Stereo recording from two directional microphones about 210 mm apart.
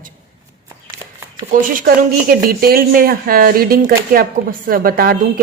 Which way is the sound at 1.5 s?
40° right (ahead or behind).